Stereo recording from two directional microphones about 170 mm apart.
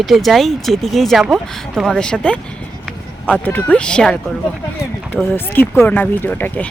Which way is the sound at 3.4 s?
10° left (ahead or behind).